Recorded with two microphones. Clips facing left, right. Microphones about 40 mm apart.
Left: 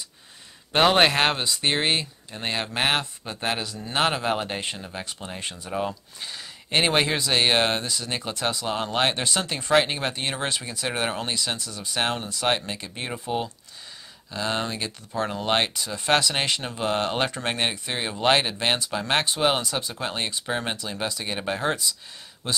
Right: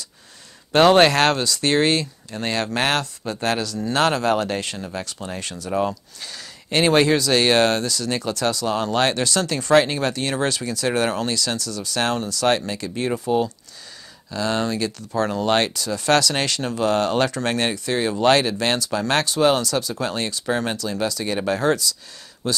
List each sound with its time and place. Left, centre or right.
0.7 s speech: centre
5.7 s speech: centre
6.2 s speech: left
14.3 s speech: left